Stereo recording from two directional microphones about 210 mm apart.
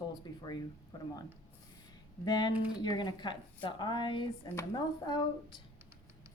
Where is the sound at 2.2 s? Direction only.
20° left (ahead or behind).